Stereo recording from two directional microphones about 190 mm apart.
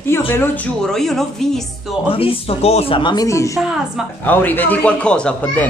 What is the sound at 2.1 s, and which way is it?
Speech, 30° left (ahead or behind).